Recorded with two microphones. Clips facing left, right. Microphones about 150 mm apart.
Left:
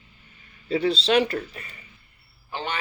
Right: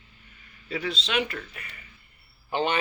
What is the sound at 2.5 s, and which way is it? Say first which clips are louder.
Speech: right 5 dB; 20° right (ahead or behind).